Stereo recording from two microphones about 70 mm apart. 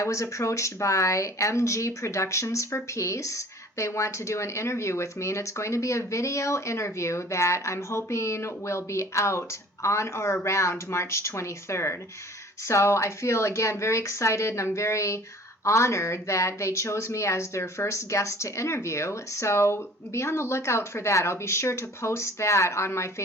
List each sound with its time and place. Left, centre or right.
0.0 s speech: left